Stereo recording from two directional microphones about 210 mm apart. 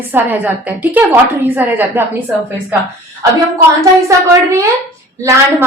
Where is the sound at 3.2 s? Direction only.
15° right (ahead or behind).